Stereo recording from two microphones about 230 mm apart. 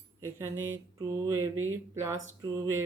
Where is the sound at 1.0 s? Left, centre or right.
Centre.